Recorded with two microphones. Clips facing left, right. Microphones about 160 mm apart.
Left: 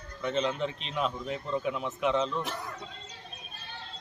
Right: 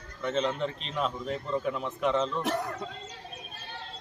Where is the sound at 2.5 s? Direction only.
60° right (ahead or behind).